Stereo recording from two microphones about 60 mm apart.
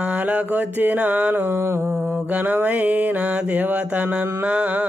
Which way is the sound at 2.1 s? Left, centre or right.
Right.